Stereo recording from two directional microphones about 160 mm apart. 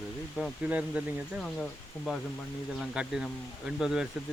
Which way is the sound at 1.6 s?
5° left (ahead or behind).